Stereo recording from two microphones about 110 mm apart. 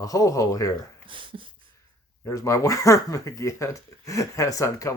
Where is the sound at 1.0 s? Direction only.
50° right (ahead or behind).